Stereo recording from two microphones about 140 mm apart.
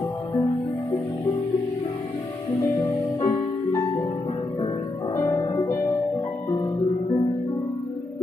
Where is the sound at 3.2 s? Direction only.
25° left (ahead or behind).